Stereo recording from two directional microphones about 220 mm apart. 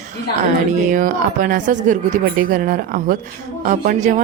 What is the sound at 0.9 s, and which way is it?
A woman's voice, 40° right (ahead or behind).